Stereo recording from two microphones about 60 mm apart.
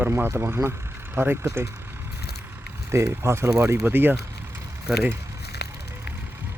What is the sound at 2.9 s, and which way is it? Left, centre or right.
Speech, right.